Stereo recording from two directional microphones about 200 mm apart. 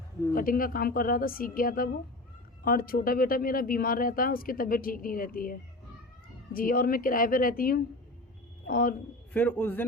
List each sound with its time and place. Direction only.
0.3 s speech: 45° left (ahead or behind)
9.3 s a man's voice: 10° left (ahead or behind)